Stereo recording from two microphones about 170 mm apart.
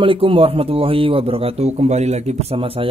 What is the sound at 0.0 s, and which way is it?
A man's voice, 30° right (ahead or behind).